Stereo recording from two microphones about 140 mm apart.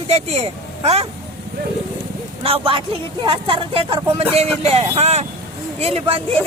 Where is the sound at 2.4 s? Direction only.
40° right (ahead or behind).